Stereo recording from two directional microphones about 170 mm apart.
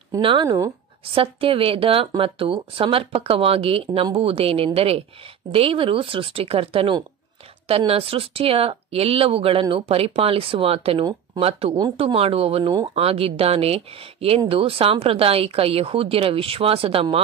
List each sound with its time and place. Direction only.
0.2 s speech: 30° right (ahead or behind)